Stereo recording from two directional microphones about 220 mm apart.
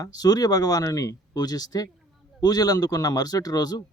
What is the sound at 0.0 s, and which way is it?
Speech, 15° left (ahead or behind).